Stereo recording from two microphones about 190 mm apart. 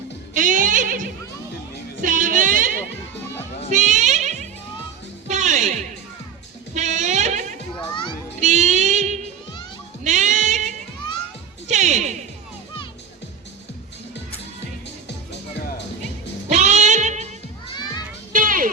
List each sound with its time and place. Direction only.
0.3 s a sound: 45° right (ahead or behind)
2.0 s music: 45° right (ahead or behind)
6.7 s a sound: 35° right (ahead or behind)
7.9 s children playing: 25° left (ahead or behind)
8.4 s music: 40° right (ahead or behind)
16.5 s music: 35° right (ahead or behind)
18.3 s music: 45° right (ahead or behind)